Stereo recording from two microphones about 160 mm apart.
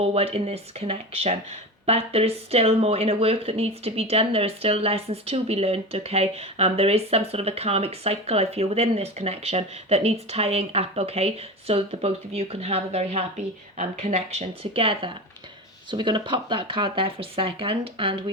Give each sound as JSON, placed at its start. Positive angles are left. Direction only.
{"t": 0.0, "sound": "speech", "side_deg": -40}